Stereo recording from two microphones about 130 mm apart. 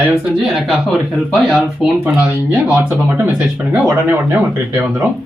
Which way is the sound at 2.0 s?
15° right (ahead or behind).